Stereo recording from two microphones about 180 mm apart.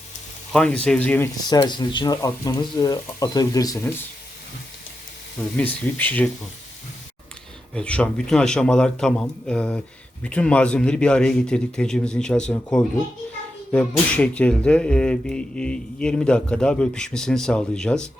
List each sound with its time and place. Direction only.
0.5 s speech: 5° left (ahead or behind)
1.5 s speech: 25° left (ahead or behind)
5.5 s speech: 10° left (ahead or behind)
7.7 s speech: 5° left (ahead or behind)